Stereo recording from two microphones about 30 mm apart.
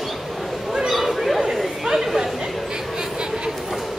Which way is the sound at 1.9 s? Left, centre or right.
Centre.